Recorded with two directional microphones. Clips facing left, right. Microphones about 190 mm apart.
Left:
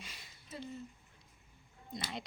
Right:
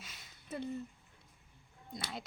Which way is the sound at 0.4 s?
60° right (ahead or behind).